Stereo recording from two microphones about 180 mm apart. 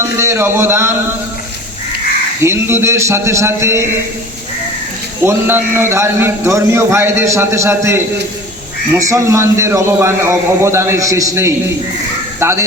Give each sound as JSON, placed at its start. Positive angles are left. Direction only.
{"t": 0.0, "sound": "a man's voice", "side_deg": -15}
{"t": 2.4, "sound": "a man's voice", "side_deg": -15}
{"t": 5.2, "sound": "a man's voice", "side_deg": -10}